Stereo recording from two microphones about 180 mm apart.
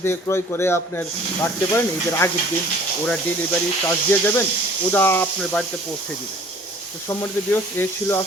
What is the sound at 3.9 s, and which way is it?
Speech, 10° left (ahead or behind).